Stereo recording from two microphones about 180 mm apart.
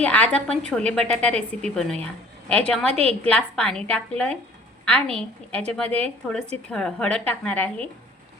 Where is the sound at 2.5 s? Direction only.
5° left (ahead or behind).